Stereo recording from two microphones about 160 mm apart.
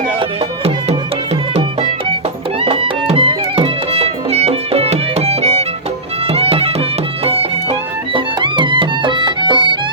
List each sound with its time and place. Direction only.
0.2 s music: 40° right (ahead or behind)